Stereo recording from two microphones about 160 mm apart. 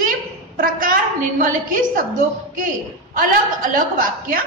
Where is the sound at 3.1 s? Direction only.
60° right (ahead or behind).